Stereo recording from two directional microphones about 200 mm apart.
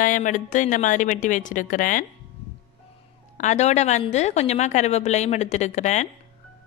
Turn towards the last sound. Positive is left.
turn(degrees=35)  # may be behind; listen again after turning